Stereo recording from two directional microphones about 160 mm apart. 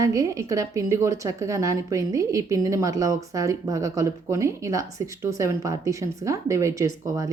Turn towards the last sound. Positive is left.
turn(degrees=-20)  # may be behind; listen again after turning